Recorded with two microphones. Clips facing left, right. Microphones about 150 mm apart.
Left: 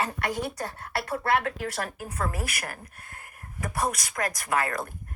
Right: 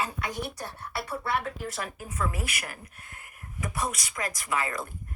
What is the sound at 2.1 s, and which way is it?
A woman's voice, 40° left (ahead or behind).